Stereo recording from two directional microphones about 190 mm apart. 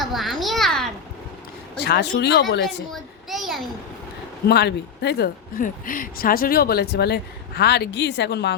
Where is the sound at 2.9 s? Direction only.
Centre (ahead or behind).